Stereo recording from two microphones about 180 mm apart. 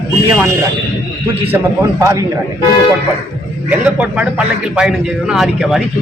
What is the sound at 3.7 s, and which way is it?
A man's voice, 10° right (ahead or behind).